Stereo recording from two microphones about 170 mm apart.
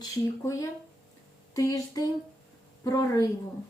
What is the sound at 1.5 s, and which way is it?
Speech, 20° left (ahead or behind).